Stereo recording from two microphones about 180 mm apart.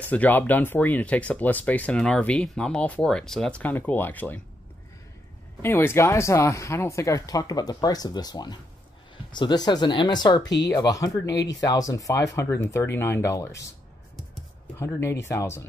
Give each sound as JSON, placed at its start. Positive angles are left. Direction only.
{"t": 0.1, "sound": "speech", "side_deg": 10}
{"t": 5.6, "sound": "speech", "side_deg": 10}
{"t": 14.8, "sound": "speech", "side_deg": 15}